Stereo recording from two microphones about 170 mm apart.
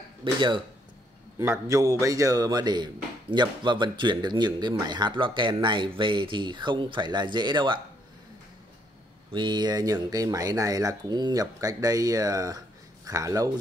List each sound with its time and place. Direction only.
0.2 s a man's voice: 30° right (ahead or behind)
1.4 s a man's voice: 15° right (ahead or behind)
9.3 s a man's voice: 25° right (ahead or behind)